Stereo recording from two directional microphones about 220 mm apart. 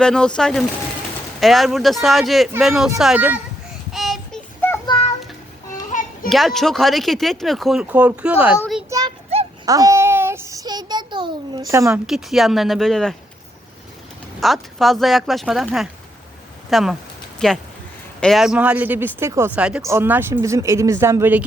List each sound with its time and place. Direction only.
0.0 s speech: 5° left (ahead or behind)
3.9 s child singing: centre (ahead or behind)
4.9 s music: 25° left (ahead or behind)
5.9 s children playing: 35° left (ahead or behind)
6.2 s speech: centre (ahead or behind)
8.9 s a sound: 15° right (ahead or behind)
9.6 s child singing: 15° right (ahead or behind)
12.0 s speech: centre (ahead or behind)
14.4 s speech: centre (ahead or behind)